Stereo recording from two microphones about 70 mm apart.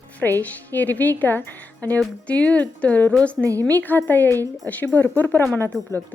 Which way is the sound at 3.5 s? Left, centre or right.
Right.